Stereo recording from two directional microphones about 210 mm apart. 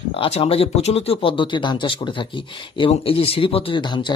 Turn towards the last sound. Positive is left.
turn(degrees=20)  # may be behind; listen again after turning